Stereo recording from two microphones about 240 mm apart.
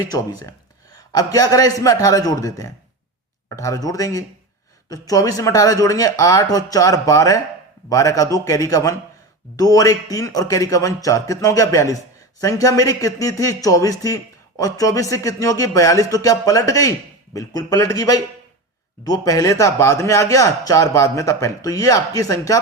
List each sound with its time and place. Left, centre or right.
0.1 s speech: centre